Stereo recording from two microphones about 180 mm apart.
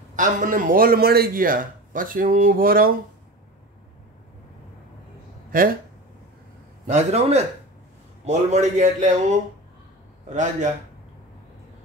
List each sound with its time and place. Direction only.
0.1 s a man's voice: 45° right (ahead or behind)
5.5 s a man's voice: 50° right (ahead or behind)
6.9 s a man's voice: 40° right (ahead or behind)